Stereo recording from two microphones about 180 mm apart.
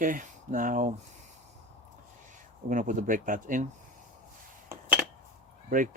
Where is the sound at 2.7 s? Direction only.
45° right (ahead or behind).